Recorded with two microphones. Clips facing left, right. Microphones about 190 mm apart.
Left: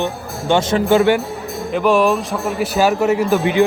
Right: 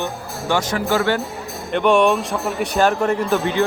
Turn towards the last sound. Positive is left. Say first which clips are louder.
# left 4 dB
turn(degrees=10)  # may be behind; listen again after turning